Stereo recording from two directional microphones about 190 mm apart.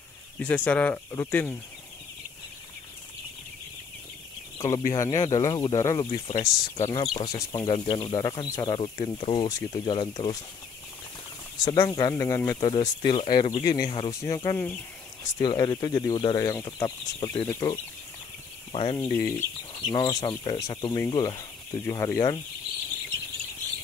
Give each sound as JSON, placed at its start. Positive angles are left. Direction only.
{"t": 0.4, "sound": "speech", "side_deg": 5}
{"t": 4.6, "sound": "speech", "side_deg": 20}
{"t": 11.6, "sound": "speech", "side_deg": 20}
{"t": 19.0, "sound": "speech", "side_deg": 15}